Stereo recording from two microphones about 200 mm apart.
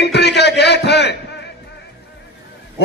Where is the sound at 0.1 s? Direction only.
55° left (ahead or behind).